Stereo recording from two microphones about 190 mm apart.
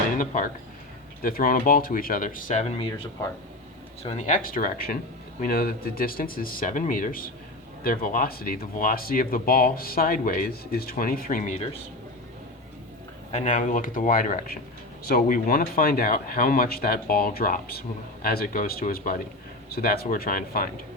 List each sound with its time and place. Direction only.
0.2 s speech: 50° left (ahead or behind); by 2.9 s 30° left (ahead or behind)
4.0 s speech: 35° left (ahead or behind)
13.3 s speech: 40° left (ahead or behind)